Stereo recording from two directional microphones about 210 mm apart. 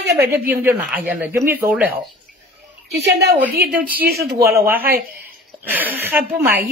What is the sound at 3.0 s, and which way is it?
Speech, 55° right (ahead or behind).